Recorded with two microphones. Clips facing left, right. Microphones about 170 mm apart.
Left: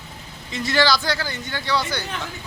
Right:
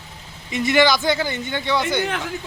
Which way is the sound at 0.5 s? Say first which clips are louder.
Right 3 dB; 20° right (ahead or behind).